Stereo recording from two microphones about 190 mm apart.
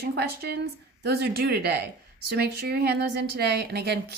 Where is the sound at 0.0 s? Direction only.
60° right (ahead or behind).